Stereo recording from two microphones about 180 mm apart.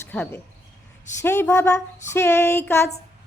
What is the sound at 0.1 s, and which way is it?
A woman's voice, 10° left (ahead or behind).